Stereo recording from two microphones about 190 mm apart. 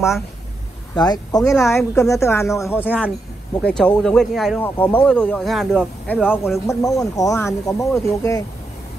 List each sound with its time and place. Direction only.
0.9 s speech: 20° left (ahead or behind)
3.6 s speech: 5° left (ahead or behind)
6.7 s speech: 20° left (ahead or behind)